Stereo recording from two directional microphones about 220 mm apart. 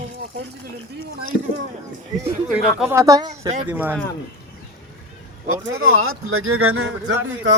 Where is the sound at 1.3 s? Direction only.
50° left (ahead or behind).